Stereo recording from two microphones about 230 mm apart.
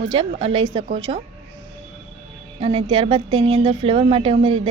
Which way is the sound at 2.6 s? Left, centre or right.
Right.